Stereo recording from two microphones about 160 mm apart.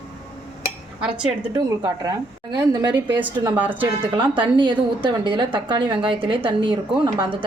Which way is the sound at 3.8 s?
30° right (ahead or behind).